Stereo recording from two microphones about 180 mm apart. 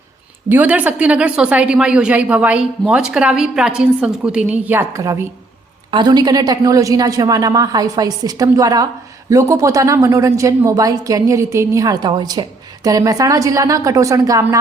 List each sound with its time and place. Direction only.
0.4 s a woman's voice: 10° right (ahead or behind)